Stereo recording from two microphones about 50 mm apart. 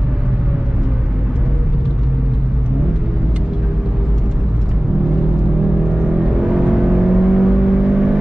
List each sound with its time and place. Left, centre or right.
6.1 s vehicle: centre